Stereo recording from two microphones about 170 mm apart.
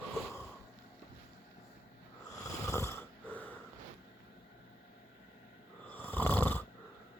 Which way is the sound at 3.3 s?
10° left (ahead or behind).